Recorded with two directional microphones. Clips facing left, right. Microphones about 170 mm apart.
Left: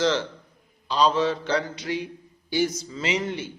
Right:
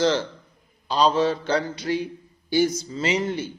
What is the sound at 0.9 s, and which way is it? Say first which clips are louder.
Mantra: right 2 dB; 35° right (ahead or behind).